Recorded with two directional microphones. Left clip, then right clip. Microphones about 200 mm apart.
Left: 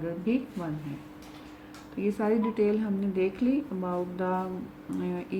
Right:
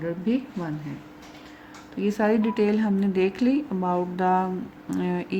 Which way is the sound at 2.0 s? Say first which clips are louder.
Right 5 dB; 45° right (ahead or behind).